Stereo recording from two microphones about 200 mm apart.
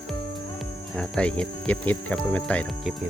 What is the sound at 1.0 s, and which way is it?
Speech, 5° left (ahead or behind).